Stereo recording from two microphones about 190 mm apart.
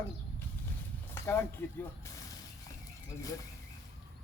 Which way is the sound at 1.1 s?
15° left (ahead or behind).